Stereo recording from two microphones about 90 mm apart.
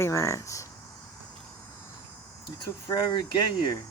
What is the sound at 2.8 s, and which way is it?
Speech, 65° left (ahead or behind).